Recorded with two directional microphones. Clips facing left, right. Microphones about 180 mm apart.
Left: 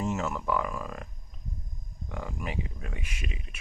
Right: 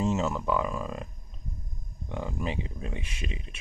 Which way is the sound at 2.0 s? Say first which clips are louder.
Right 4 dB; 25° right (ahead or behind).